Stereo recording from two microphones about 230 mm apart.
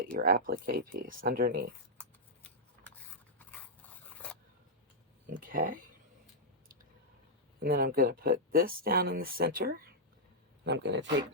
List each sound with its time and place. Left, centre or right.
0.0 s speech: right
2.0 s shuffling cards: centre
5.2 s speech: right
7.6 s speech: right